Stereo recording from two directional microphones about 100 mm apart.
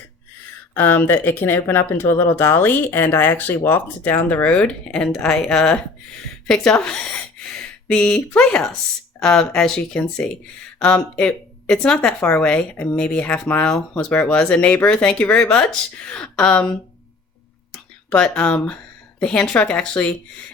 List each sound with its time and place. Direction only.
0.7 s a woman's voice: 20° left (ahead or behind)
17.7 s a sound: 10° left (ahead or behind)
19.2 s speech: 10° left (ahead or behind)